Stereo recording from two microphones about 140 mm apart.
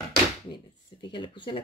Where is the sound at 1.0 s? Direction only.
35° left (ahead or behind).